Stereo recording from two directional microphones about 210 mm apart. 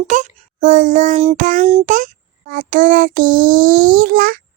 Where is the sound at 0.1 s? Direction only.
35° right (ahead or behind).